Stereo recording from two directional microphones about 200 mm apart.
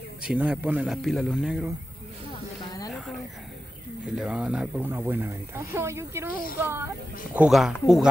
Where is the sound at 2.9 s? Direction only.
Centre (ahead or behind).